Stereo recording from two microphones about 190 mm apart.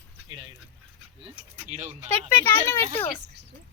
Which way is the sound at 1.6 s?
40° right (ahead or behind).